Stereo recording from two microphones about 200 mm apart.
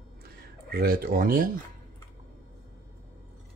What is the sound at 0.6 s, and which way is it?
Speech, 50° right (ahead or behind).